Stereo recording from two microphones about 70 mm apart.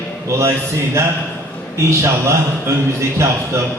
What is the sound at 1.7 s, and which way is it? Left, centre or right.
A man's voice, right.